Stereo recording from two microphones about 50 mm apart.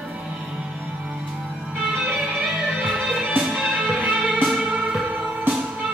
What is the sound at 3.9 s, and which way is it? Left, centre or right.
Music, right.